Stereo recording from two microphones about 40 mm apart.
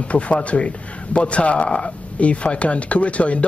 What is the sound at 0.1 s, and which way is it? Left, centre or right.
A man's voice, left.